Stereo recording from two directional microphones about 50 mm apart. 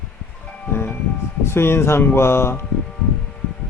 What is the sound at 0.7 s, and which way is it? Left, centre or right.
Music, left.